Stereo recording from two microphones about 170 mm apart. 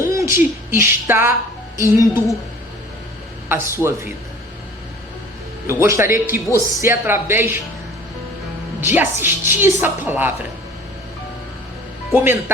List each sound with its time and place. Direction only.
0.1 s a sound: 15° right (ahead or behind)
0.7 s a woman's voice: 15° right (ahead or behind)
3.5 s a woman's voice: 15° right (ahead or behind)
5.6 s a woman's voice: 15° right (ahead or behind)
8.8 s a woman's voice: 10° right (ahead or behind)
12.1 s a woman's voice: 15° right (ahead or behind)